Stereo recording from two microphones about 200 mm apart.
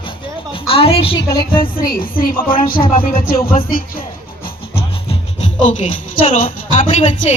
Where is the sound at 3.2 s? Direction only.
50° left (ahead or behind).